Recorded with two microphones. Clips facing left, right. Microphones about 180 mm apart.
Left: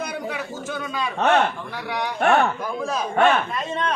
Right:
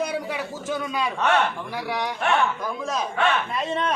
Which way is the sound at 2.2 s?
60° left (ahead or behind).